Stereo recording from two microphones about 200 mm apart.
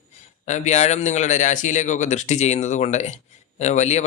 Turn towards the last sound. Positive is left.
turn(degrees=35)  # may be behind; listen again after turning